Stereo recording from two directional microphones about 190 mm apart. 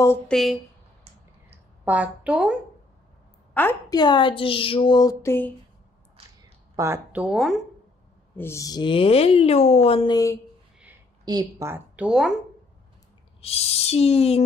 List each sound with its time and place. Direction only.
0.3 s speech: centre (ahead or behind)
1.5 s a sound: 5° right (ahead or behind)
3.9 s speech: 25° left (ahead or behind)
6.8 s a woman's voice: 10° right (ahead or behind)
8.4 s speech: 15° left (ahead or behind)
11.2 s a woman's voice: 20° right (ahead or behind); by 12.4 s 5° right (ahead or behind)
13.4 s a sound: 35° left (ahead or behind)